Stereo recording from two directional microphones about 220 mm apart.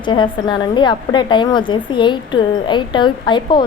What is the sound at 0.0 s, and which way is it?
A woman's voice, 20° left (ahead or behind).